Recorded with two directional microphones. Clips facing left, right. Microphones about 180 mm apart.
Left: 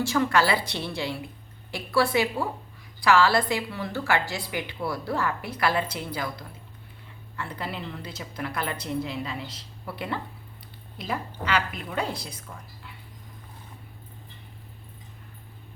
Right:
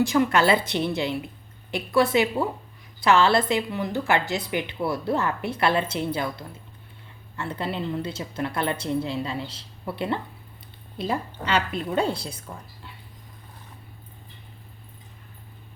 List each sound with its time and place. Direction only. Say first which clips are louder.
0.0 s a woman's voice: right 3 dB; 20° right (ahead or behind)